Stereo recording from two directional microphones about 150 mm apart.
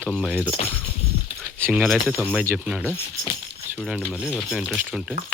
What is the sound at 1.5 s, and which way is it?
Speech, 15° right (ahead or behind).